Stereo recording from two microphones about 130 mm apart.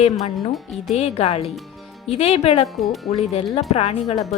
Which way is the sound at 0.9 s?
55° left (ahead or behind).